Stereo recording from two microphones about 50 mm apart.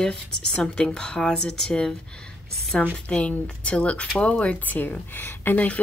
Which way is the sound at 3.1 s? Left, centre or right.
Centre.